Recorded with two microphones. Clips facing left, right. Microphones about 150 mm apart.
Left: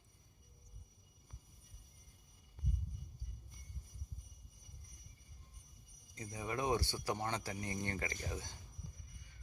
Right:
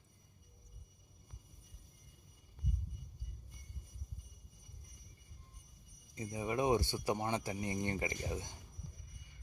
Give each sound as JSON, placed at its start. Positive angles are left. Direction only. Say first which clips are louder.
{"t": 6.1, "sound": "speech", "louder": "right 5 dB", "side_deg": -20}